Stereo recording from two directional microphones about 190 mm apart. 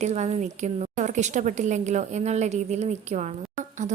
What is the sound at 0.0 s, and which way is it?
A woman's voice, 35° right (ahead or behind).